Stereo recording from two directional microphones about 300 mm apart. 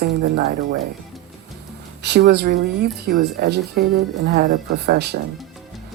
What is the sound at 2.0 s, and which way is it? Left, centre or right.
Speech, right.